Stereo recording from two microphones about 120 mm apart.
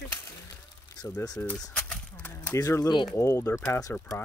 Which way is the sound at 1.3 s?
10° left (ahead or behind).